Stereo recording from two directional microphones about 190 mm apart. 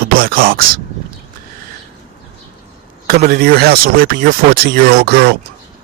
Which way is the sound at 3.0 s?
50° right (ahead or behind).